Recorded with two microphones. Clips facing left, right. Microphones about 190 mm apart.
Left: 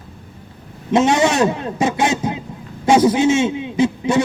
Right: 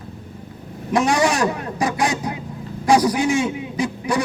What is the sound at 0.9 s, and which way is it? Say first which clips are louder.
Speech: left 3 dB; 25° left (ahead or behind).